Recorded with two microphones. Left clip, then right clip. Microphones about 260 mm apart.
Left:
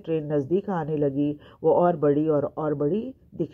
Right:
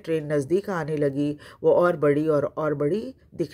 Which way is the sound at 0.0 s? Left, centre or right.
Right.